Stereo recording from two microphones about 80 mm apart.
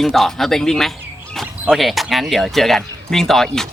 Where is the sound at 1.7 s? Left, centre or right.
Centre.